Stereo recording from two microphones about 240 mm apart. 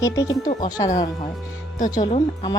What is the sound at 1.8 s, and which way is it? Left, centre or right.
Speech, left.